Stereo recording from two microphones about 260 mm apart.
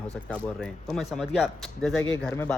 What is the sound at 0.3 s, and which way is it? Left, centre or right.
Speech, centre.